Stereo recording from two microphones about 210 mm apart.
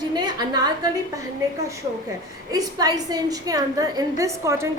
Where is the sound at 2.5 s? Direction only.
20° right (ahead or behind).